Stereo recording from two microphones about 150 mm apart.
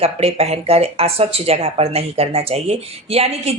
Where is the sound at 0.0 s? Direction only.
40° right (ahead or behind).